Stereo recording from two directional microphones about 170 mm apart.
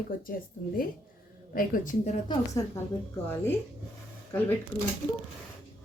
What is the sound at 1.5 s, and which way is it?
Speech, 50° left (ahead or behind).